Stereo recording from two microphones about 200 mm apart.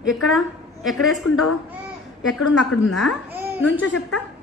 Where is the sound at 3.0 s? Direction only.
Centre (ahead or behind).